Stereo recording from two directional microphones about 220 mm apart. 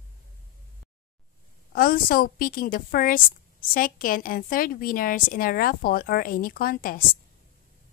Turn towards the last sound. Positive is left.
turn(degrees=40)  # may be behind; listen again after turning